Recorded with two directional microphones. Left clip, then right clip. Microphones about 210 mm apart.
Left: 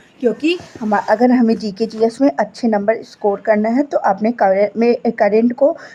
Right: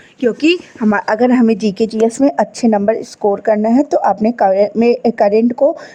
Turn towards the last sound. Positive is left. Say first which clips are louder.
# right 2 dB
turn(degrees=-30)  # may be behind; listen again after turning